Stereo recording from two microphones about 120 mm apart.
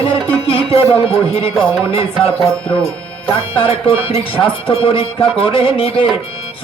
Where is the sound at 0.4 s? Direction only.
50° left (ahead or behind).